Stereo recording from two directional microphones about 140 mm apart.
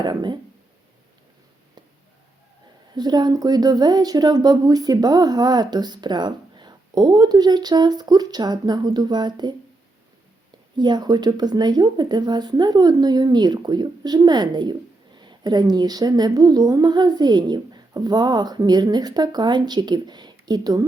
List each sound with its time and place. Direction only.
0.0 s speech: 30° right (ahead or behind)
2.9 s speech: 30° right (ahead or behind)
10.8 s speech: 30° right (ahead or behind)